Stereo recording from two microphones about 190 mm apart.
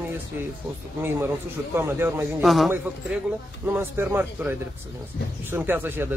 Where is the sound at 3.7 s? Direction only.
10° right (ahead or behind).